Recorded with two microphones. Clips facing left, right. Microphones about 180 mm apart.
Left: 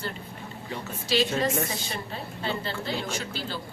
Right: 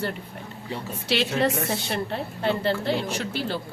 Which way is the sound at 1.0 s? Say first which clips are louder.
Right 2 dB; 65° right (ahead or behind).